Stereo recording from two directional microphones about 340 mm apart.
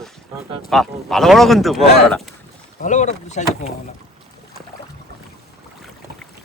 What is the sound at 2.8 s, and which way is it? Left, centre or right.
Speech, left.